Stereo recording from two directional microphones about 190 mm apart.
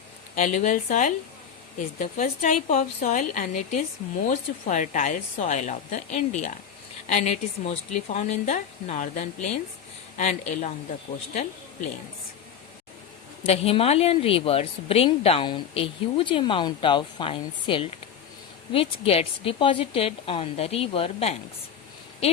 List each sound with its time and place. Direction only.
0.3 s a woman's voice: 40° left (ahead or behind)
13.4 s a woman's voice: 30° left (ahead or behind)